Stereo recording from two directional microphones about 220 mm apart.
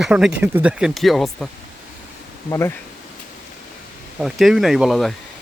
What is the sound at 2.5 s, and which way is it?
Speech, 10° left (ahead or behind).